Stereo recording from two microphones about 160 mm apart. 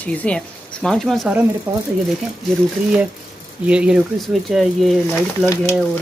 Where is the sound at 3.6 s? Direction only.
5° right (ahead or behind).